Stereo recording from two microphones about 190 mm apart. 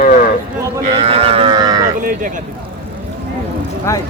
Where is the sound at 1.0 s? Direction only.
30° right (ahead or behind).